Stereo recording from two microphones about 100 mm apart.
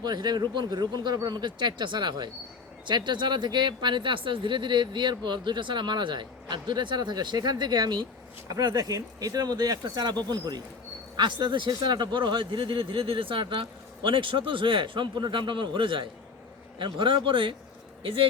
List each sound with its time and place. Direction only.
0.0 s speech: 45° right (ahead or behind); by 18.3 s 65° right (ahead or behind)